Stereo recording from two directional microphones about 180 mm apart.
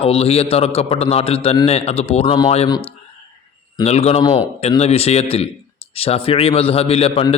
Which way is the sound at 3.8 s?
35° left (ahead or behind).